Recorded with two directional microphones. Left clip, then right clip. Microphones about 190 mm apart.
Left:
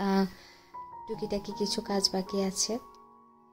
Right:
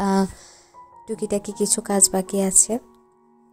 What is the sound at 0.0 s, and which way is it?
Music, 40° right (ahead or behind).